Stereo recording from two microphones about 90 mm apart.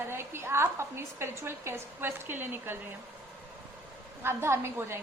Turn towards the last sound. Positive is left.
turn(degrees=-30)  # may be behind; listen again after turning